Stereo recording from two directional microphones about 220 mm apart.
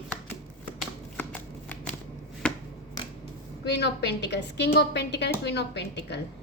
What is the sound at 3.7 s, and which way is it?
A woman's voice, 50° left (ahead or behind).